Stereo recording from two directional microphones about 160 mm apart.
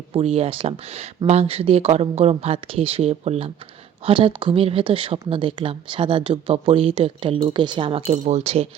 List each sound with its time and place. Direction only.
0.1 s speech: 40° right (ahead or behind)
8.1 s speech: 45° right (ahead or behind)